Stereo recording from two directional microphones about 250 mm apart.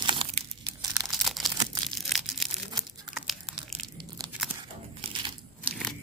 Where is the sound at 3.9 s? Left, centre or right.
Centre.